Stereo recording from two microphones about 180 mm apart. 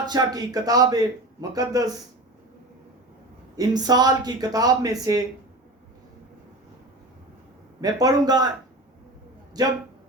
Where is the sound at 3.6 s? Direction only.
20° right (ahead or behind).